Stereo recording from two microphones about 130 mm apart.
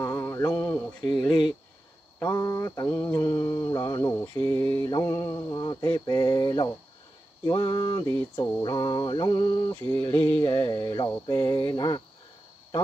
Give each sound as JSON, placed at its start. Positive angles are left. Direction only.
{"t": 0.0, "sound": "mantra", "side_deg": 20}
{"t": 1.0, "sound": "mantra", "side_deg": 35}
{"t": 4.8, "sound": "mantra", "side_deg": 25}
{"t": 8.1, "sound": "mantra", "side_deg": 15}
{"t": 8.6, "sound": "mantra", "side_deg": 35}
{"t": 10.1, "sound": "music", "side_deg": 15}
{"t": 10.5, "sound": "mantra", "side_deg": 30}